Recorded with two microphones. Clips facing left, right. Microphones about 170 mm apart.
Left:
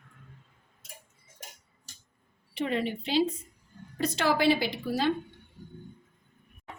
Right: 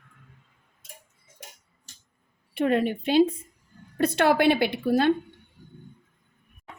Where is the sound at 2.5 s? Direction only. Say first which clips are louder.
Right 6 dB; 55° right (ahead or behind).